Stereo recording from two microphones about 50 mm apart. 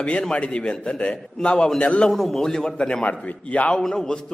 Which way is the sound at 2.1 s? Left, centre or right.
Centre.